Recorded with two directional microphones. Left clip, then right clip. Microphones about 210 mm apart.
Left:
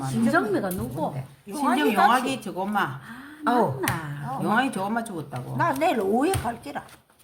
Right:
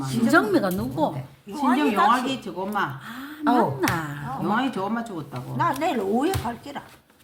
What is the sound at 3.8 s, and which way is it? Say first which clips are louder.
Speech: right 3 dB; 55° right (ahead or behind).